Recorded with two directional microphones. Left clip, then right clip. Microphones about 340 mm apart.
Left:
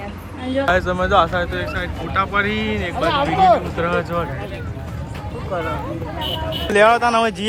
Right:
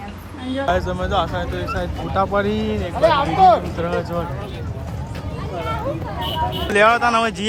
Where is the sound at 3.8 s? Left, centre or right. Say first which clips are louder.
Left 3 dB; centre.